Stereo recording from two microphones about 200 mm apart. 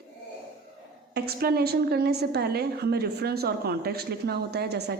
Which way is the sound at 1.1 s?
50° right (ahead or behind).